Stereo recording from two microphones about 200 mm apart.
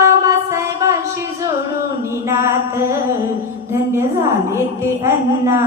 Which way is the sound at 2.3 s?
15° right (ahead or behind).